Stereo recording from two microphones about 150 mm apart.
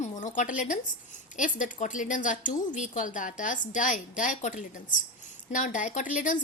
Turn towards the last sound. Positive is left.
turn(degrees=60)  # may be behind; listen again after turning